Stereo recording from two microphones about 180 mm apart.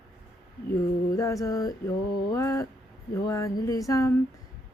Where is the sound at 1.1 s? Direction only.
20° left (ahead or behind).